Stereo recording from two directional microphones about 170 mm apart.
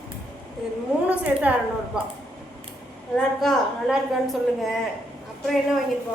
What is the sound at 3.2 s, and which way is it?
A woman's voice, centre (ahead or behind).